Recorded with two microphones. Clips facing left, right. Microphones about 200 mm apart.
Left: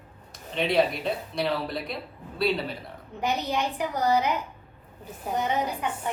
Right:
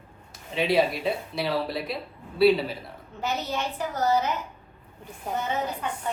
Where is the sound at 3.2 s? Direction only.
15° left (ahead or behind).